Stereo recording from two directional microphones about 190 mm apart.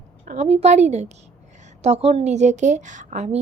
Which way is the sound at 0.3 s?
35° right (ahead or behind).